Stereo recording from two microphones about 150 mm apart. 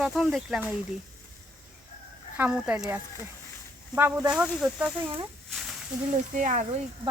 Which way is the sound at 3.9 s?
15° right (ahead or behind).